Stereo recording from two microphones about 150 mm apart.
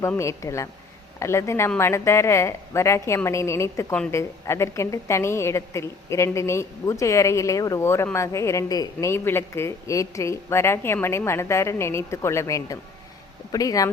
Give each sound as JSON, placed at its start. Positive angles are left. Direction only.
{"t": 0.0, "sound": "a woman's voice", "side_deg": 20}